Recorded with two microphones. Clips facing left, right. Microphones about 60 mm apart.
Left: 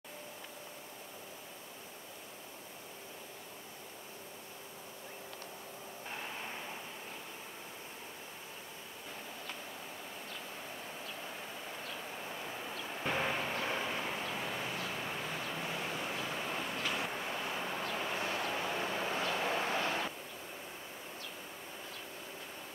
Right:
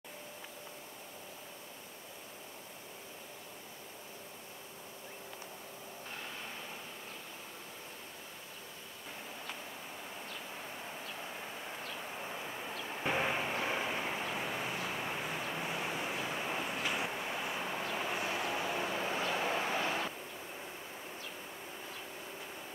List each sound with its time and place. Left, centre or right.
11.8 s vehicle: centre
12.9 s vehicle: centre